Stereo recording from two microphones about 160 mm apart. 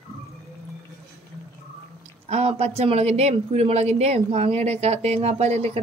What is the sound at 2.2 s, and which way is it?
Speech, 40° right (ahead or behind).